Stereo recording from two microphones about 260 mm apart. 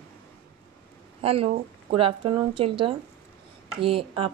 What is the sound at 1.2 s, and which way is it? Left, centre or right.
Speech, right.